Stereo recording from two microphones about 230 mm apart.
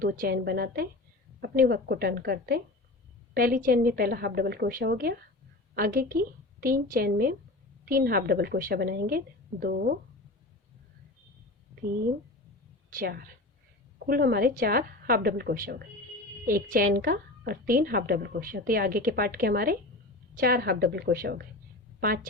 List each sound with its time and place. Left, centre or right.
0.0 s a woman's voice: right
12.9 s a woman's voice: right